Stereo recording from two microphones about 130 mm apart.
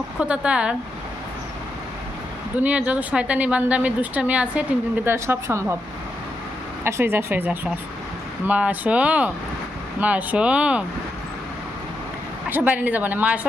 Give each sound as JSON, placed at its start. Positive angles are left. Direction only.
{"t": 0.2, "sound": "a woman's voice", "side_deg": -10}
{"t": 2.6, "sound": "a woman's voice", "side_deg": -10}
{"t": 6.8, "sound": "a woman's voice", "side_deg": -15}
{"t": 12.5, "sound": "a woman's voice", "side_deg": -15}